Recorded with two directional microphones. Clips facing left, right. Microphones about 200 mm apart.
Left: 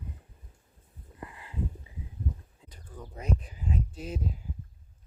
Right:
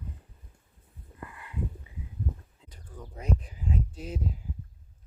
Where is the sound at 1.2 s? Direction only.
25° left (ahead or behind).